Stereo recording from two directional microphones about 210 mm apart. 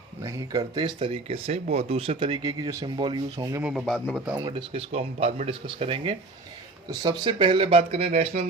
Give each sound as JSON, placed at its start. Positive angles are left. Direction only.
{"t": 0.3, "sound": "speech", "side_deg": -20}
{"t": 3.6, "sound": "a man's voice", "side_deg": 0}
{"t": 4.4, "sound": "speech", "side_deg": -25}